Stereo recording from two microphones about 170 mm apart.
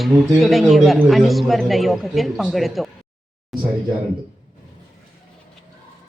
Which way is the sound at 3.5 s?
Centre (ahead or behind).